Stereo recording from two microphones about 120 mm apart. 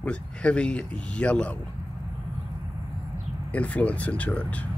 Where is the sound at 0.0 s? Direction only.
10° left (ahead or behind).